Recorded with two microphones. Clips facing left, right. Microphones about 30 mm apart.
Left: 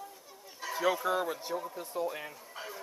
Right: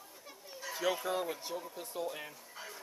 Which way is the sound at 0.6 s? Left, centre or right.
Centre.